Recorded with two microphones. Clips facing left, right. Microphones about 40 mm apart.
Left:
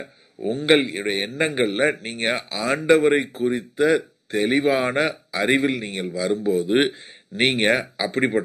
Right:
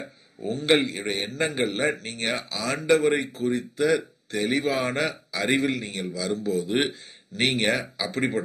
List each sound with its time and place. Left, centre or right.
0.4 s a man's voice: left